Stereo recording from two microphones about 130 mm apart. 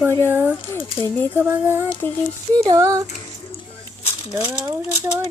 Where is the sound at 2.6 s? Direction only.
25° right (ahead or behind).